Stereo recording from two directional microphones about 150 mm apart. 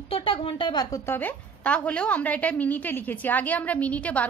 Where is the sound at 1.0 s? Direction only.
10° left (ahead or behind).